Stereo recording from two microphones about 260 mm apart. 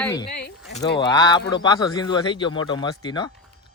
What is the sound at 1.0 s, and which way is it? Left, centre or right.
Speech, centre.